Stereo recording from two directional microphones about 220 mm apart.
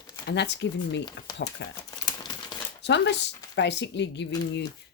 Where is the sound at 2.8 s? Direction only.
50° left (ahead or behind).